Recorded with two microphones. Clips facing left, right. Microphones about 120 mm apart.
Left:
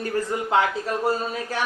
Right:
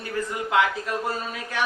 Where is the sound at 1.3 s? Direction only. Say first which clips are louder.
Left 1 dB; 35° left (ahead or behind).